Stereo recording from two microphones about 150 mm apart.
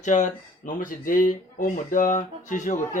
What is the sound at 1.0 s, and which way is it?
Speech, 65° left (ahead or behind).